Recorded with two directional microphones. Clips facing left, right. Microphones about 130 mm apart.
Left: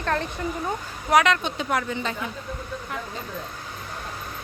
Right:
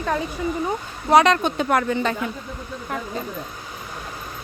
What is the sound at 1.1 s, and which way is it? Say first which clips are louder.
Speech: right 4 dB; 30° right (ahead or behind).